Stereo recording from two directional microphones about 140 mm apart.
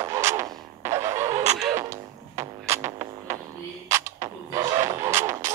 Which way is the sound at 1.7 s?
20° right (ahead or behind).